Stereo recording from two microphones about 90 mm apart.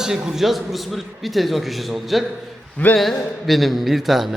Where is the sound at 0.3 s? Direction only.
5° right (ahead or behind).